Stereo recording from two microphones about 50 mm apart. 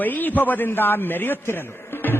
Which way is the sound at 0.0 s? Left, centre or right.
Left.